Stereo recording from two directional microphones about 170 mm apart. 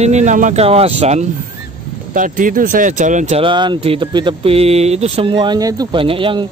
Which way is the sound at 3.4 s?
25° right (ahead or behind).